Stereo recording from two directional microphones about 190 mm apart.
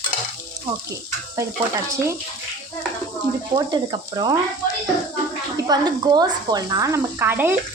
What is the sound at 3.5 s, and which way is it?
Speech, 20° right (ahead or behind).